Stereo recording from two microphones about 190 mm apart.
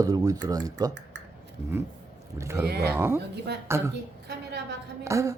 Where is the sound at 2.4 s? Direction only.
15° right (ahead or behind).